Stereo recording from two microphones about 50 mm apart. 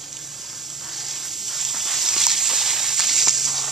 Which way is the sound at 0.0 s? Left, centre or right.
Centre.